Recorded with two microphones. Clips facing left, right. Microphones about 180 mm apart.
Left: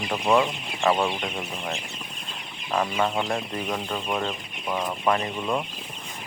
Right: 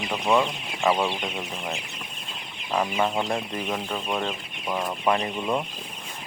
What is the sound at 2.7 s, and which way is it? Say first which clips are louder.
Chicken: even; 10° right (ahead or behind).